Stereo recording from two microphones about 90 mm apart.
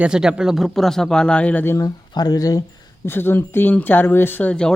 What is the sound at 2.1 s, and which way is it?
Speech, 45° left (ahead or behind).